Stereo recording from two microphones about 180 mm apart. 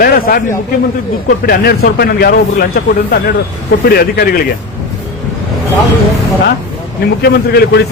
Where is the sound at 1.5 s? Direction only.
60° left (ahead or behind).